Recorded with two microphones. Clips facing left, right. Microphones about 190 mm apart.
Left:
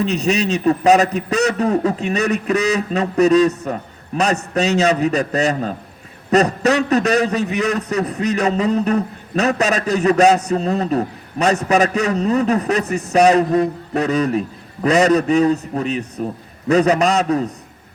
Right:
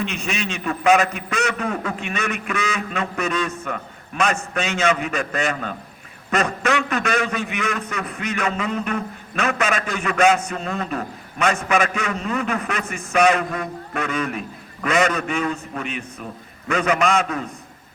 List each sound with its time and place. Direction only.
0.0 s a man's voice: 40° left (ahead or behind)